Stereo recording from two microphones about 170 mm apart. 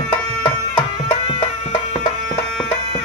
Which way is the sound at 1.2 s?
30° left (ahead or behind).